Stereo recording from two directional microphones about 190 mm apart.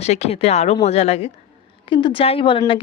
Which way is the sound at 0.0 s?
35° left (ahead or behind).